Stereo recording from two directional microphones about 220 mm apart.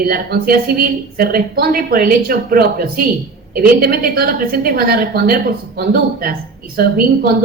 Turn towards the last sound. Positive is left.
turn(degrees=-45)  # may be behind; listen again after turning